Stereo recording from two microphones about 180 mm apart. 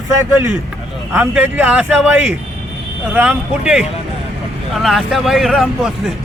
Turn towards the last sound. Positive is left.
turn(degrees=0)  # may be behind; listen again after turning